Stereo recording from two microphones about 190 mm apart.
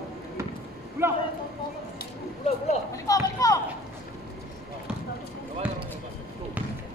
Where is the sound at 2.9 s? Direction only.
15° left (ahead or behind).